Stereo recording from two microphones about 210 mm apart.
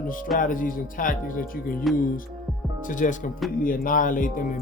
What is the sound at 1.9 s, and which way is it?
Speech, centre (ahead or behind).